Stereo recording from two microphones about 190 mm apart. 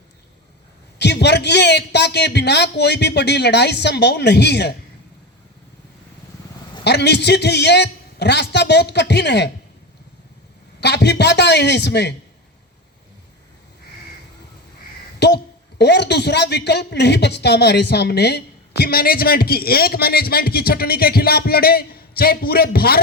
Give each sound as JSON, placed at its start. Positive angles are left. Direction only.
{"t": 0.9, "sound": "a man's voice", "side_deg": 60}
{"t": 6.8, "sound": "a man's voice", "side_deg": 60}
{"t": 10.8, "sound": "a man's voice", "side_deg": 60}
{"t": 15.2, "sound": "a man's voice", "side_deg": 60}